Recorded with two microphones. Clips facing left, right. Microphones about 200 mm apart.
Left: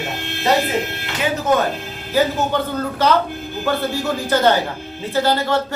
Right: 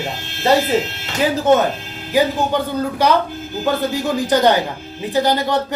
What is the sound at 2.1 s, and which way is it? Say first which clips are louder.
Speech: right 1 dB; 15° right (ahead or behind).